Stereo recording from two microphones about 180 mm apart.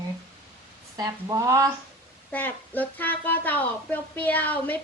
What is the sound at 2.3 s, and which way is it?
Speech, 10° left (ahead or behind).